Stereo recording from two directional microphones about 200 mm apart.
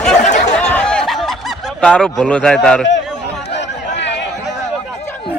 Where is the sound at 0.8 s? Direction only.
5° left (ahead or behind).